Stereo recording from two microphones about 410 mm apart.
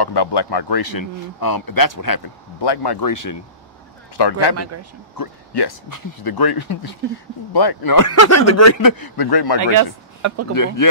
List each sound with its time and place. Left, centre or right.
0.0 s speech: left
3.1 s speech: left
4.2 s speech: left
4.6 s speech: right
5.1 s speech: left
8.1 s speech: left
9.6 s speech: right
10.2 s speech: right
10.5 s speech: left